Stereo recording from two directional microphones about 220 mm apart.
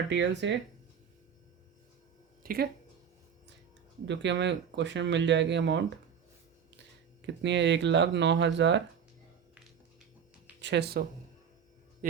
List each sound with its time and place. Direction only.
0.1 s speech: 55° right (ahead or behind)
2.4 s a sound: 40° right (ahead or behind)
4.0 s speech: 55° right (ahead or behind)
7.2 s speech: 55° right (ahead or behind)
10.6 s speech: 50° right (ahead or behind)